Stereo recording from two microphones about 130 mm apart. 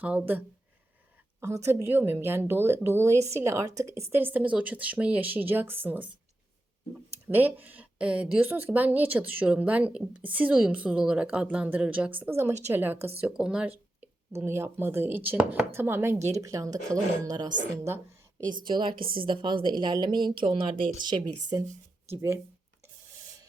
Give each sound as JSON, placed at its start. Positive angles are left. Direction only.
{"t": 1.4, "sound": "a woman's voice", "side_deg": -20}
{"t": 7.3, "sound": "a woman's voice", "side_deg": -15}
{"t": 14.3, "sound": "a woman's voice", "side_deg": -20}
{"t": 18.7, "sound": "speech", "side_deg": -40}
{"t": 18.9, "sound": "a woman's voice", "side_deg": -90}
{"t": 19.2, "sound": "speech", "side_deg": -40}